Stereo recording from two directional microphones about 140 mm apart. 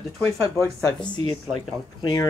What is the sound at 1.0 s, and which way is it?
Speech, 35° left (ahead or behind).